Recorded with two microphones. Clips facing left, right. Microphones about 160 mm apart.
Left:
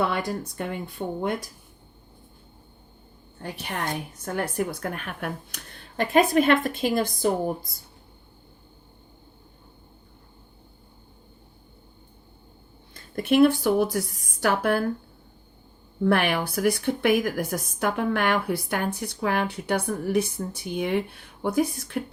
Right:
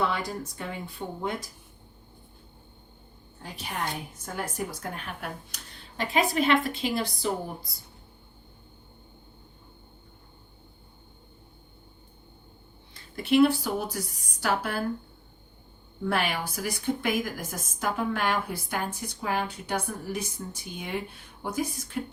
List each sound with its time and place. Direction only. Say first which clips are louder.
0.1 s a woman's voice: left 4 dB; 55° left (ahead or behind)
3.4 s a woman's voice: left 3 dB; 60° left (ahead or behind); by 7.5 s 45° left (ahead or behind)
12.9 s a woman's voice: left 2 dB; 50° left (ahead or behind)
16.0 s a woman's voice: left 6 dB; 60° left (ahead or behind)